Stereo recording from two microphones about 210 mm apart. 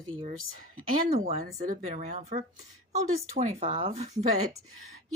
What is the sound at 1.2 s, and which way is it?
Speech, 35° right (ahead or behind).